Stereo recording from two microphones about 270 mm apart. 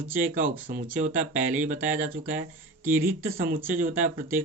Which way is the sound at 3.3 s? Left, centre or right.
Right.